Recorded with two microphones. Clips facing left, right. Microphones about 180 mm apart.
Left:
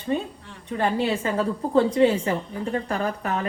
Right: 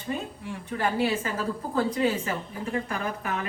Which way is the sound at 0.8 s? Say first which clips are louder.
Left 3 dB; 30° left (ahead or behind).